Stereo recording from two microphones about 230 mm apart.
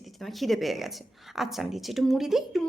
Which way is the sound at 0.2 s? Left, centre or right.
Centre.